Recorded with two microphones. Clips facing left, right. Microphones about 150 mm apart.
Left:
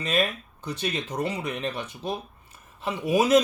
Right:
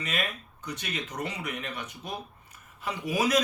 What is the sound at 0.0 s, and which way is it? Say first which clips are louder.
Speech: left 7 dB; 30° left (ahead or behind).